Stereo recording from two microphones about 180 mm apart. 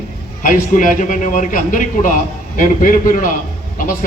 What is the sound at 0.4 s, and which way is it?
A man's voice, 45° left (ahead or behind).